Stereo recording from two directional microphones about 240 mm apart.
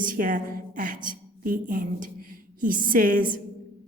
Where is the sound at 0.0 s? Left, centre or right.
Right.